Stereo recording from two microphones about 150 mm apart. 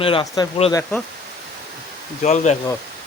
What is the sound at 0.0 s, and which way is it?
Speech, 35° left (ahead or behind).